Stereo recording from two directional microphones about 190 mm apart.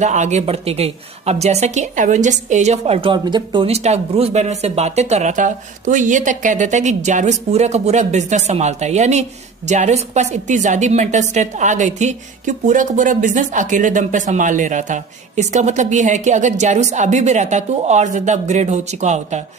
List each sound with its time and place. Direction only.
0.0 s a woman's voice: 40° right (ahead or behind)